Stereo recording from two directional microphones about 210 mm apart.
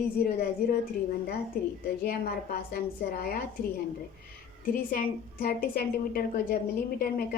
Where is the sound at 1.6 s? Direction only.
45° left (ahead or behind).